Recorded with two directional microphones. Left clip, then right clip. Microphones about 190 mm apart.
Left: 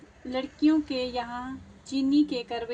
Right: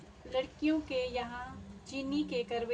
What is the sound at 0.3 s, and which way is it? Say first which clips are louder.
Speech: left 7 dB; 60° left (ahead or behind).